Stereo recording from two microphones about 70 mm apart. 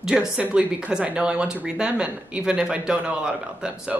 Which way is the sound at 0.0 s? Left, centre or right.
Centre.